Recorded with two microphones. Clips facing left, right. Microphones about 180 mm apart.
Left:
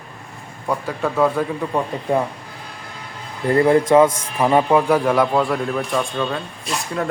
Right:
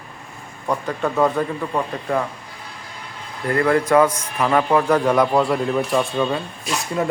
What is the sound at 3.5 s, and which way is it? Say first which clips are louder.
A man's voice: left 3 dB; 25° left (ahead or behind).